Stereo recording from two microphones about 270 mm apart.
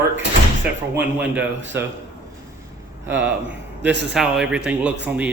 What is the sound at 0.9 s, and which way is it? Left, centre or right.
Speech, centre.